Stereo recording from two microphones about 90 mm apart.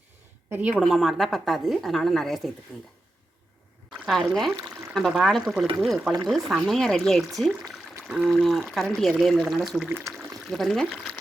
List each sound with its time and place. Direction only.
0.5 s a woman's voice: 15° right (ahead or behind)
0.8 s speech: centre (ahead or behind)
4.0 s speech: centre (ahead or behind)